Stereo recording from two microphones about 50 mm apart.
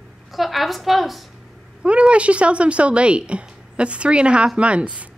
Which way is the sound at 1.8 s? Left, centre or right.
Right.